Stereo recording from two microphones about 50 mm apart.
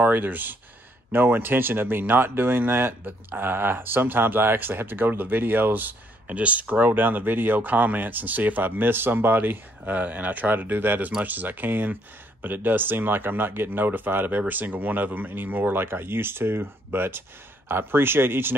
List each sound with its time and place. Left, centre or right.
0.0 s speech: right